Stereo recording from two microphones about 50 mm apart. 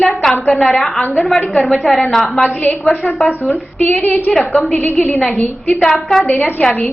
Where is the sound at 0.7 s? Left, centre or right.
Centre.